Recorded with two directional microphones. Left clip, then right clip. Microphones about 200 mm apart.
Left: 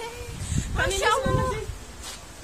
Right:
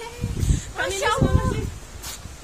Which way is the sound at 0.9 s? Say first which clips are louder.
Even; 25° left (ahead or behind).